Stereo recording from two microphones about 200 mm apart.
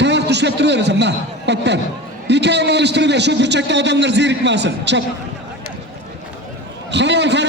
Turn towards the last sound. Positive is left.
turn(degrees=-60)  # may be behind; listen again after turning